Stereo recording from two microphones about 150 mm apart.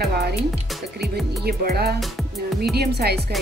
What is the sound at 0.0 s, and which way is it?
Music, 90° right.